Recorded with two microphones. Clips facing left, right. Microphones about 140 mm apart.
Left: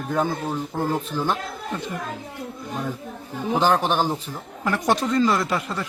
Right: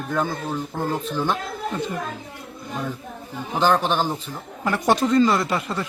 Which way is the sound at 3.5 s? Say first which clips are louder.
Even; 10° left (ahead or behind).